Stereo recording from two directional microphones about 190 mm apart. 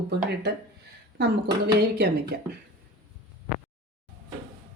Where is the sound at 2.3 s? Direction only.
55° right (ahead or behind).